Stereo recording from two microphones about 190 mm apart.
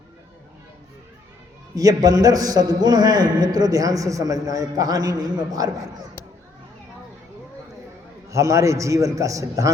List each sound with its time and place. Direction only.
1.7 s a man's voice: 20° right (ahead or behind)
8.3 s a man's voice: 15° right (ahead or behind)